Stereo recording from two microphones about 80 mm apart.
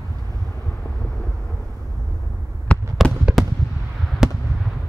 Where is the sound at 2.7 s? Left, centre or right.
Centre.